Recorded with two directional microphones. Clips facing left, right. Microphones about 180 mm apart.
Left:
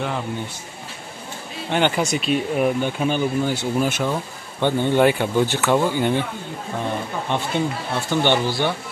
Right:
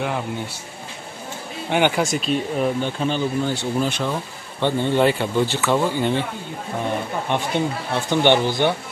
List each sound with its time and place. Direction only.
1.7 s speech: 10° right (ahead or behind)
2.0 s speech: 5° left (ahead or behind)
7.2 s speech: 15° right (ahead or behind)